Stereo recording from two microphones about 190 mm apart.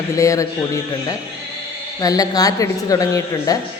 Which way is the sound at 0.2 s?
15° left (ahead or behind).